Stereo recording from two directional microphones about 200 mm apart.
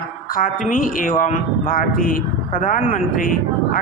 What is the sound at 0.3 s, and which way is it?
A man's voice, 45° left (ahead or behind).